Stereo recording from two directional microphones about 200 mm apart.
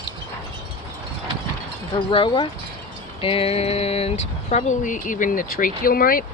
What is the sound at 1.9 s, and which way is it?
Speech, 25° left (ahead or behind).